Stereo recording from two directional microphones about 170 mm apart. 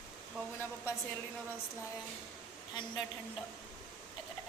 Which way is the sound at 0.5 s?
15° left (ahead or behind).